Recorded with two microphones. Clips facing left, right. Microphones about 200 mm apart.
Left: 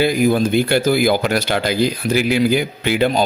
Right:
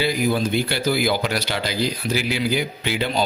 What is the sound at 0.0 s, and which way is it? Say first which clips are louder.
Speech: left 6 dB; 50° left (ahead or behind).